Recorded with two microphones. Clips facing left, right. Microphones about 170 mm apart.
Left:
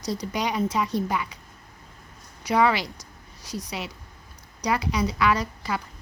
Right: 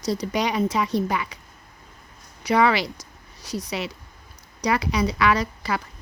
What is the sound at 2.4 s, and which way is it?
A woman's voice, 80° right.